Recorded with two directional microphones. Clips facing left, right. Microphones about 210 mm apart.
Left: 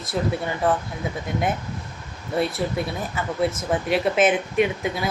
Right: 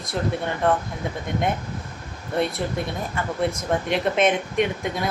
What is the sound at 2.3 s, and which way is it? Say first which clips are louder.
Speech: left 1 dB; 5° left (ahead or behind).